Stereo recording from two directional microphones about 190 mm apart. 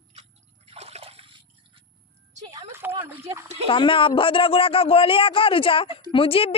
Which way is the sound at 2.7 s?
10° right (ahead or behind).